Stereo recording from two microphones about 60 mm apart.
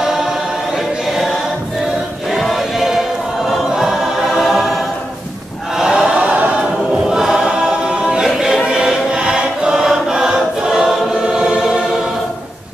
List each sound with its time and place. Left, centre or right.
2.3 s choir: centre
4.4 s choir: centre
5.8 s choir: centre
7.1 s choir: centre